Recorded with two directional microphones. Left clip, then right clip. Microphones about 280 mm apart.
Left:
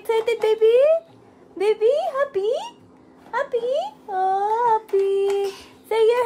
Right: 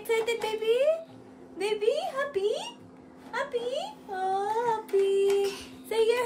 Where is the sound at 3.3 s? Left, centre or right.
Left.